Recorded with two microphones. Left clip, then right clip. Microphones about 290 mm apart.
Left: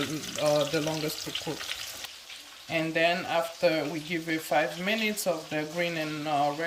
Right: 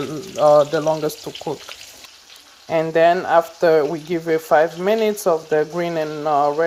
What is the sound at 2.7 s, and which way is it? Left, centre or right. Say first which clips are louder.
Speech: right 11 dB; right.